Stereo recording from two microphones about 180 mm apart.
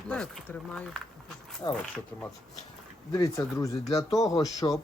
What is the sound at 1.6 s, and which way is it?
Speech, 25° left (ahead or behind).